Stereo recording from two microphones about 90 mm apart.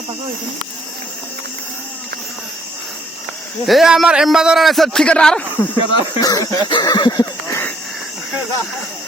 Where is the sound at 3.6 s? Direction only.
Centre (ahead or behind).